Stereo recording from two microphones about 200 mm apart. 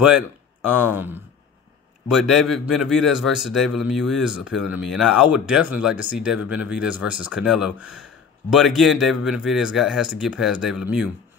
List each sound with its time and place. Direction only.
0.0 s a man's voice: 5° right (ahead or behind)